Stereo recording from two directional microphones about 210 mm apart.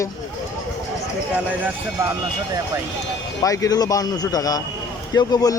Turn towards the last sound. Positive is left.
turn(degrees=20)  # may be behind; listen again after turning